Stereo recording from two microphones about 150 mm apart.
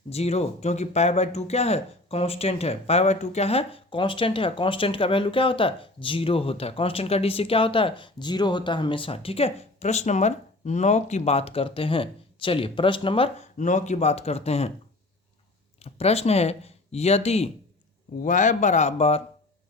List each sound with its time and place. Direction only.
0.1 s speech: 45° left (ahead or behind)
13.4 s speech: 55° left (ahead or behind)
15.8 s speech: 45° left (ahead or behind)
18.2 s speech: 55° left (ahead or behind)